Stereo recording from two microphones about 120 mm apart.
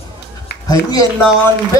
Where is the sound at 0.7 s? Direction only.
30° left (ahead or behind).